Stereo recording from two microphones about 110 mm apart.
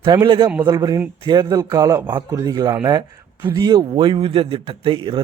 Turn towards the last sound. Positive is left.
turn(degrees=-50)  # may be behind; listen again after turning